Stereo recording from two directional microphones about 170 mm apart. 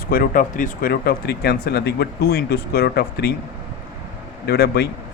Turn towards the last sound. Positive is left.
turn(degrees=70)  # may be behind; listen again after turning